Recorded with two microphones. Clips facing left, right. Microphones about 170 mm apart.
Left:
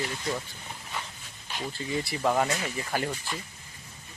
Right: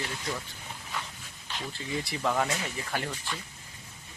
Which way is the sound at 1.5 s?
5° left (ahead or behind).